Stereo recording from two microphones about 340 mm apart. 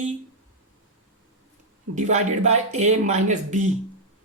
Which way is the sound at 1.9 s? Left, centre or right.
Centre.